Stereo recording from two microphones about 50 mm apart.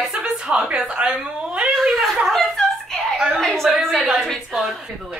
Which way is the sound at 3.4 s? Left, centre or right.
Centre.